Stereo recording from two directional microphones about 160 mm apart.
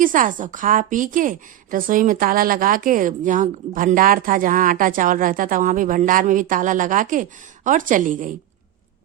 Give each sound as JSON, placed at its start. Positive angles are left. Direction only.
{"t": 0.0, "sound": "a woman's voice", "side_deg": -55}